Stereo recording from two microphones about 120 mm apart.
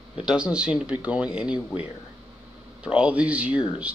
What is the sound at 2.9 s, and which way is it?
Speech, 10° right (ahead or behind).